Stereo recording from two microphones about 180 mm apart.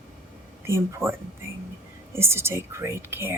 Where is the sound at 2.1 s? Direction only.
15° right (ahead or behind).